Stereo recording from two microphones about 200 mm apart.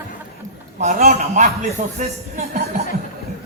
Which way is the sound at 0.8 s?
35° right (ahead or behind).